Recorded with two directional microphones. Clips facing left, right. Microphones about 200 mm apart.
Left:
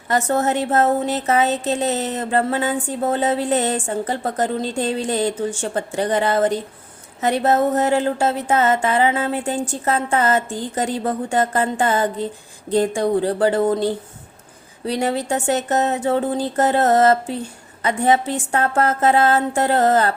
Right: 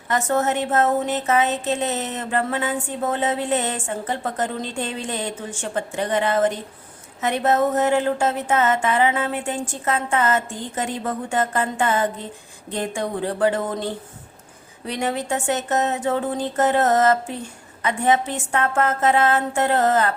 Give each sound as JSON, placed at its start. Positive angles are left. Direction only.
{"t": 0.1, "sound": "a woman's voice", "side_deg": 35}